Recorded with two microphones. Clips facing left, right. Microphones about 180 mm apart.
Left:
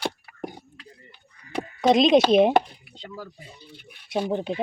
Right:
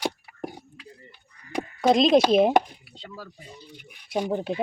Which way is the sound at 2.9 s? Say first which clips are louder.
Left 3 dB; centre (ahead or behind).